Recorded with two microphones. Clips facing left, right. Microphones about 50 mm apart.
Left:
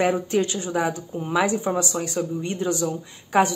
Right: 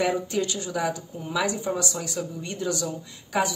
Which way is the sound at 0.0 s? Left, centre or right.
Left.